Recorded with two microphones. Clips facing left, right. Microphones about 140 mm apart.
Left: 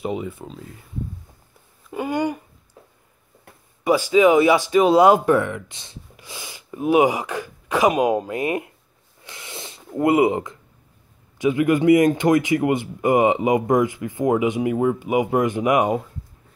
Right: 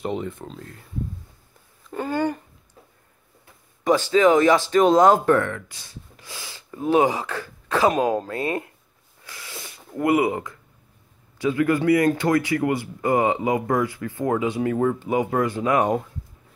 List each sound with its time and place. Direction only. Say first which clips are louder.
0.0 s speech: left 1 dB; 5° left (ahead or behind)
1.9 s speech: left 1 dB; 15° left (ahead or behind)
3.8 s a man's voice: left 2 dB; 10° left (ahead or behind)
6.1 s a sound: left 3 dB; 15° left (ahead or behind)
9.2 s snort: left 2 dB; 20° left (ahead or behind)
11.3 s a man's voice: left 2 dB; 15° left (ahead or behind)